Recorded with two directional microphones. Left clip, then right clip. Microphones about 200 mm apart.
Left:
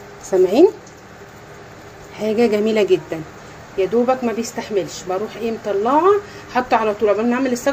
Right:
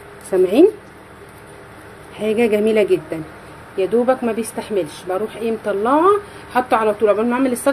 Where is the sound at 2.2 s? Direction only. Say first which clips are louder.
Even; 5° right (ahead or behind).